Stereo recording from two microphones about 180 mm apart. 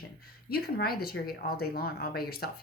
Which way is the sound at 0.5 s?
60° left (ahead or behind).